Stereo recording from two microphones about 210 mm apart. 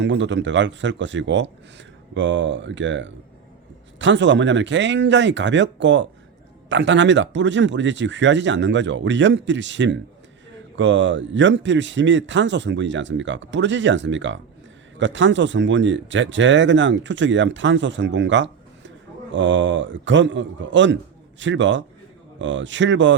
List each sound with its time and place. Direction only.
0.0 s speech: 60° right (ahead or behind)